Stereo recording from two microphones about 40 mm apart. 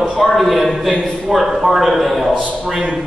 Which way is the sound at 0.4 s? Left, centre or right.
Centre.